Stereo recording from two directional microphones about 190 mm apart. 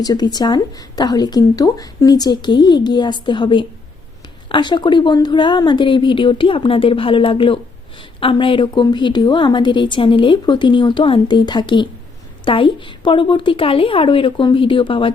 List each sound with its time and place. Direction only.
0.0 s speech: 20° left (ahead or behind)